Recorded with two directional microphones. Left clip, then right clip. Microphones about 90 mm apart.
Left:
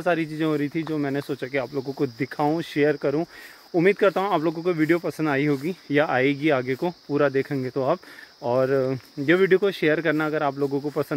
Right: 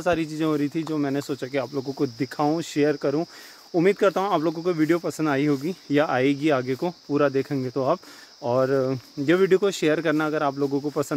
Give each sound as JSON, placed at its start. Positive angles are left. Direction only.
{"t": 0.0, "sound": "speech", "side_deg": -40}